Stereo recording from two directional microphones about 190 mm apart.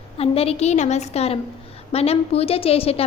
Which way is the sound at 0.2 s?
30° left (ahead or behind).